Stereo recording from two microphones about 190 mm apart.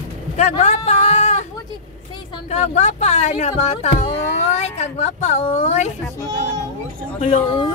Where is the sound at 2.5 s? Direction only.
35° left (ahead or behind).